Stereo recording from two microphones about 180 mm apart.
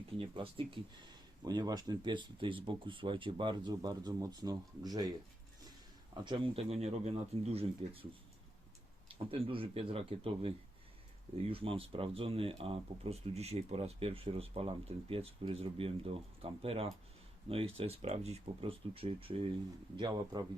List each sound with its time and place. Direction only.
0.2 s speech: 30° right (ahead or behind)
6.2 s speech: 30° right (ahead or behind)
9.0 s speech: 30° right (ahead or behind)